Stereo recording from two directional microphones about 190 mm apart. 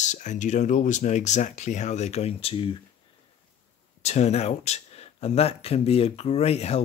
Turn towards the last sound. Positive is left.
turn(degrees=35)  # may be behind; listen again after turning